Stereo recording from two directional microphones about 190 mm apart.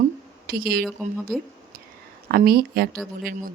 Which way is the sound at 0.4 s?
50° right (ahead or behind).